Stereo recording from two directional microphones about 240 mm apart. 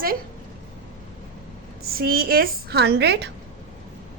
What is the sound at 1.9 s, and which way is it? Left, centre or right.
A woman's voice, right.